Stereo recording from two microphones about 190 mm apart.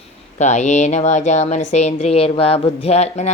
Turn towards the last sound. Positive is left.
turn(degrees=35)  # may be behind; listen again after turning